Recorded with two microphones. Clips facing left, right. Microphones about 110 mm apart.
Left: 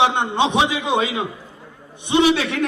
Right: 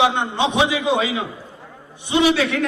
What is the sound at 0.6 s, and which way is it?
Speech, 25° left (ahead or behind).